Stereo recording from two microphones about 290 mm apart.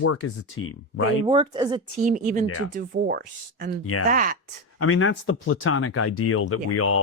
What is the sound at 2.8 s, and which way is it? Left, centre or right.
Speech, right.